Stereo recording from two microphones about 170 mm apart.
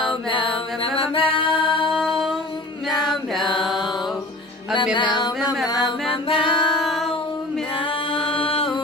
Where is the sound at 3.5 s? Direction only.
Centre (ahead or behind).